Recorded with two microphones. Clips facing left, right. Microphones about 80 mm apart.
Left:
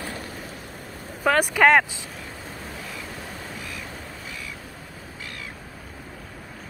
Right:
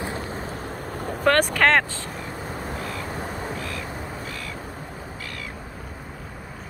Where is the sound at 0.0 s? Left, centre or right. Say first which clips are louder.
Right 4 dB; right.